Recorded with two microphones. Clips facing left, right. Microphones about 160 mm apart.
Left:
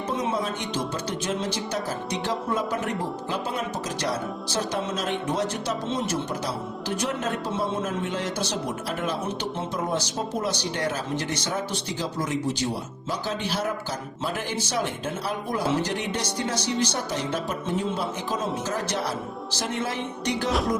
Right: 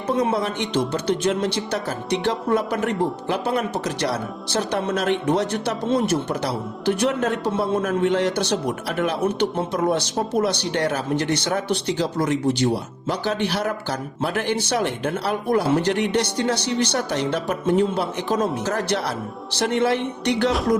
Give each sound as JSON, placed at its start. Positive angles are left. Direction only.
{"t": 0.2, "sound": "speech", "side_deg": -70}